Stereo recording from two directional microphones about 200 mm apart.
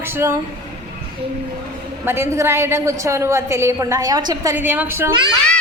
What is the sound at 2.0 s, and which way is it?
A woman's voice, 10° right (ahead or behind).